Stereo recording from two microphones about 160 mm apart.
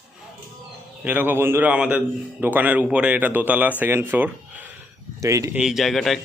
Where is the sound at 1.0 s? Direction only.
10° right (ahead or behind).